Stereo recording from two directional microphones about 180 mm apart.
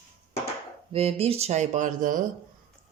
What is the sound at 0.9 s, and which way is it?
Speech, 35° right (ahead or behind).